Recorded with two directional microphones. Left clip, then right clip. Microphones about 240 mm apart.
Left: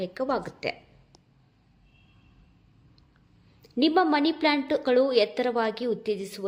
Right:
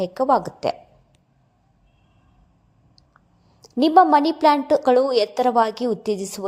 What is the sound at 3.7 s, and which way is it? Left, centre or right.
A woman's voice, right.